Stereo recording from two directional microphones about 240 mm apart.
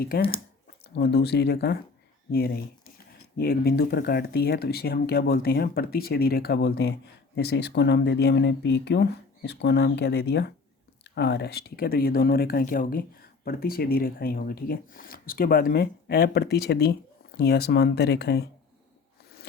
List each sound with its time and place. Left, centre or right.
0.0 s speech: left
3.3 s speech: left